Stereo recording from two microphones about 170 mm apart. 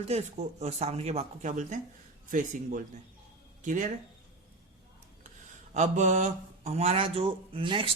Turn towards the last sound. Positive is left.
turn(degrees=-30)  # may be behind; listen again after turning